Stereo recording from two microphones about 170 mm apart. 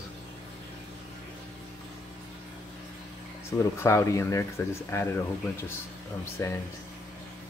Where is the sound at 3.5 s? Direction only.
15° left (ahead or behind).